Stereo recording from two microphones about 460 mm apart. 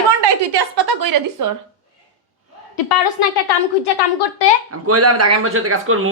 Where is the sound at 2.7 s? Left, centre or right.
Left.